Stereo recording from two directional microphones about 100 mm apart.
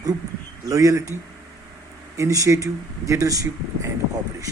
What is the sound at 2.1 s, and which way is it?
Speech, 35° right (ahead or behind).